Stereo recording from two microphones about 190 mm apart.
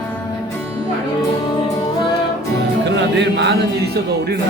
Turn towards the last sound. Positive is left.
turn(degrees=-65)  # may be behind; listen again after turning